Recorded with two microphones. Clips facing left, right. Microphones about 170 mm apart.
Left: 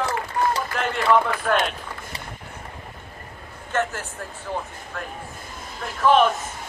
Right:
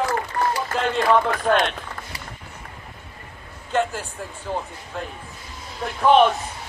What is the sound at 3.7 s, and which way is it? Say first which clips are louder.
Speech: right 2 dB; 15° right (ahead or behind).